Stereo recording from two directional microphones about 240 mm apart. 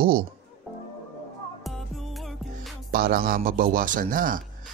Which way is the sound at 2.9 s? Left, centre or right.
Right.